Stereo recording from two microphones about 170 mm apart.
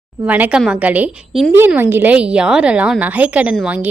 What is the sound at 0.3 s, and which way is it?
A woman's voice, 10° right (ahead or behind).